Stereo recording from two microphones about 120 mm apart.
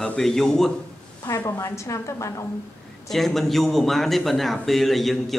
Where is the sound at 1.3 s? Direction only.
25° left (ahead or behind).